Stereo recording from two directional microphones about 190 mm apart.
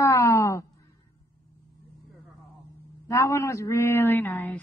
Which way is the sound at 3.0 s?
15° left (ahead or behind).